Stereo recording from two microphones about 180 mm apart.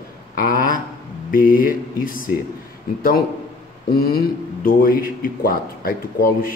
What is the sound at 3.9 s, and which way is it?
A man's voice, 60° left (ahead or behind).